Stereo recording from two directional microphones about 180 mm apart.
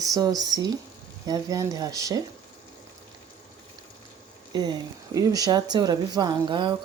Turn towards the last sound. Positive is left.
turn(degrees=-25)  # may be behind; listen again after turning